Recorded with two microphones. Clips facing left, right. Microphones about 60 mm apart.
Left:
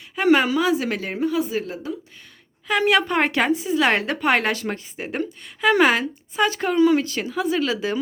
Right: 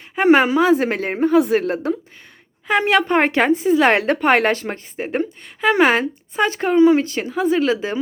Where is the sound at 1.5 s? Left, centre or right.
Right.